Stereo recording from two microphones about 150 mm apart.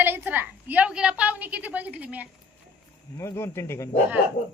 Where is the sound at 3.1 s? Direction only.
20° left (ahead or behind).